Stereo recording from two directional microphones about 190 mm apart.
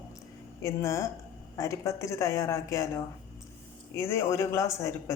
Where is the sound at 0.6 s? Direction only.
15° left (ahead or behind).